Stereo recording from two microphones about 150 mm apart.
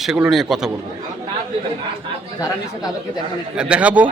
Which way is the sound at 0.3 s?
Centre (ahead or behind).